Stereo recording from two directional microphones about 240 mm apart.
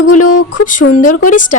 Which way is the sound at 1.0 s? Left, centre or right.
Left.